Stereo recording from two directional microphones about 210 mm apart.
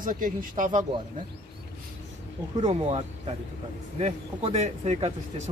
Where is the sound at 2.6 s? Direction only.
30° right (ahead or behind).